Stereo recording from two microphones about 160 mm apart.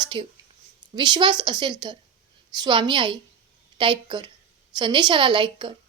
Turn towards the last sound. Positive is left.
turn(degrees=-30)  # may be behind; listen again after turning